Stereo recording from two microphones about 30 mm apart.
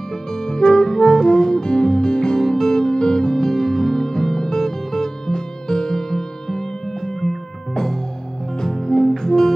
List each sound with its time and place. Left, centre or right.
0.3 s music: left
2.3 s music: centre
7.7 s music: centre